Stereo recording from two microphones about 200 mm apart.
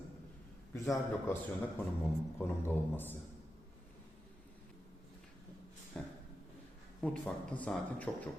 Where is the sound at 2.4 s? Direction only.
10° left (ahead or behind).